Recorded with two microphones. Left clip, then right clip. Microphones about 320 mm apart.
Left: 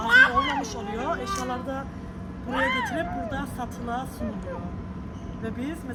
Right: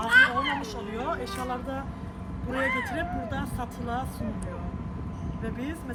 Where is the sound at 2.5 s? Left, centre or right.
Centre.